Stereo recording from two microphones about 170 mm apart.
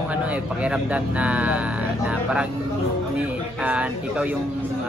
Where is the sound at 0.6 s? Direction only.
5° right (ahead or behind).